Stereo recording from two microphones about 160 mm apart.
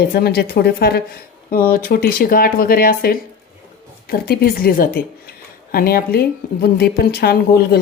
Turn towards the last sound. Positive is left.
turn(degrees=80)